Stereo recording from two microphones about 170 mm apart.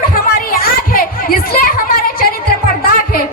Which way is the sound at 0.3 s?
60° left (ahead or behind).